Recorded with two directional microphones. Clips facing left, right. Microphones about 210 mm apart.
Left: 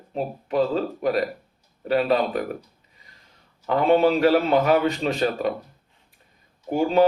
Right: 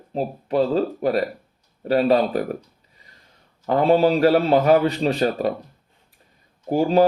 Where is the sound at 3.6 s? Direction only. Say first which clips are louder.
Right 2 dB; 35° right (ahead or behind).